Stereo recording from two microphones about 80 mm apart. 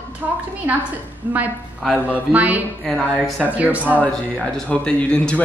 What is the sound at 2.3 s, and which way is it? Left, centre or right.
Speech, centre.